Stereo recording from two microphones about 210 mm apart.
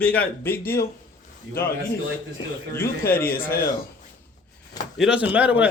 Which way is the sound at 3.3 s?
45° left (ahead or behind).